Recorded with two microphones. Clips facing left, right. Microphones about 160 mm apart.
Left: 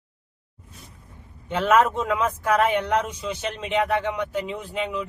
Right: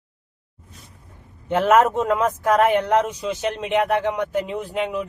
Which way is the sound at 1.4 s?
45° right (ahead or behind).